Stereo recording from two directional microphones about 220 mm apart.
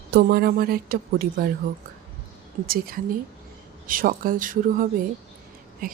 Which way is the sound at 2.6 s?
40° right (ahead or behind).